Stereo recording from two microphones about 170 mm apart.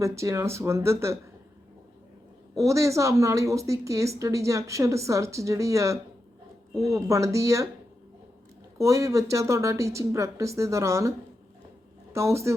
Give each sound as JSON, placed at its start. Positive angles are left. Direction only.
{"t": 0.0, "sound": "a woman's voice", "side_deg": -15}
{"t": 2.6, "sound": "a woman's voice", "side_deg": -20}
{"t": 8.8, "sound": "a woman's voice", "side_deg": -20}
{"t": 12.1, "sound": "a woman's voice", "side_deg": -15}